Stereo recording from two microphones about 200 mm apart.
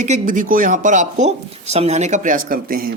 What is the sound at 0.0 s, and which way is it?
A woman's voice, 40° right (ahead or behind).